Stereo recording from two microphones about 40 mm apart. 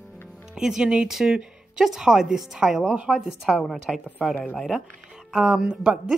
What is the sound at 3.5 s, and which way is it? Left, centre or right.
Speech, centre.